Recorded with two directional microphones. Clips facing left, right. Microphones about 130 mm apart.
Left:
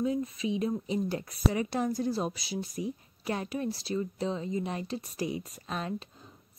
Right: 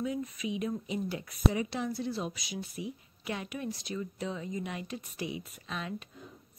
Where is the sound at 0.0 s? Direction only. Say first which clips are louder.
Left 4 dB; 30° left (ahead or behind).